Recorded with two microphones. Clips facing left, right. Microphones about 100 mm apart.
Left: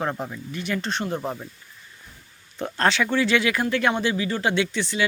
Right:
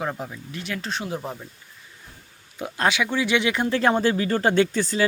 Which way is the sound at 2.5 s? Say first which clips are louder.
Left 1 dB; 10° right (ahead or behind).